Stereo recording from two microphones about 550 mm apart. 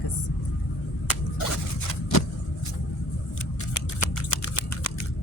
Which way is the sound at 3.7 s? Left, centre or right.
Left.